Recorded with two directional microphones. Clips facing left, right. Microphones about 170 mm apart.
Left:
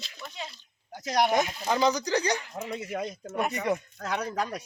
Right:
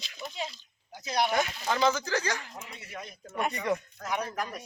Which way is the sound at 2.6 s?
90° left.